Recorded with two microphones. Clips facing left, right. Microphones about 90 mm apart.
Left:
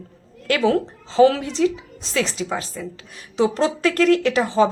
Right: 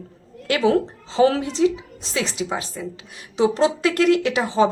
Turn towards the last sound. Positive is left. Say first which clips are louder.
# left 1 dB
turn(degrees=-25)  # may be behind; listen again after turning